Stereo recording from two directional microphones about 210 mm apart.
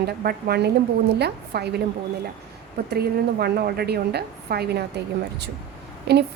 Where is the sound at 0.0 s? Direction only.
45° right (ahead or behind).